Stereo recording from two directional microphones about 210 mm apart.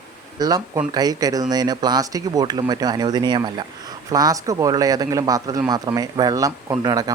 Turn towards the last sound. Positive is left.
turn(degrees=-20)  # may be behind; listen again after turning